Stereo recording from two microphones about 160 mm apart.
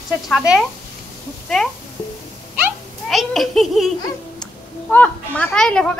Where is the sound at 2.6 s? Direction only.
Centre (ahead or behind).